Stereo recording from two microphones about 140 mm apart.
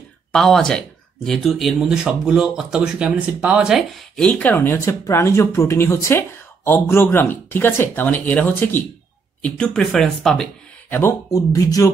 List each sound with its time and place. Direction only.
0.3 s speech: 5° left (ahead or behind)
10.9 s speech: 20° left (ahead or behind)